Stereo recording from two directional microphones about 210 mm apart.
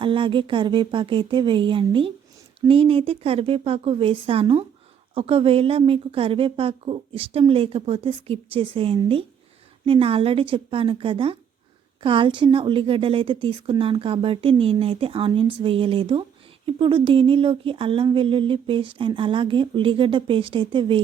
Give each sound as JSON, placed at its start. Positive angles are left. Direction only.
{"t": 0.0, "sound": "speech", "side_deg": -25}